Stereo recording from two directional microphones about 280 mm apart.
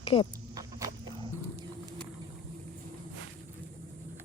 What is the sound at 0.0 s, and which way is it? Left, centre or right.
Speech, centre.